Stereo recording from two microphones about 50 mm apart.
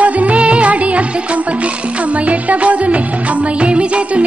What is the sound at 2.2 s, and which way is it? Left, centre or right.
Music, right.